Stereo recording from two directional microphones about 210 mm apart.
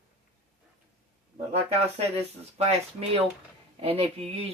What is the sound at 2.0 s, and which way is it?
Speech, 30° right (ahead or behind).